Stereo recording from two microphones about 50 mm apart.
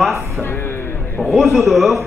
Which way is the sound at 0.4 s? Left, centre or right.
Left.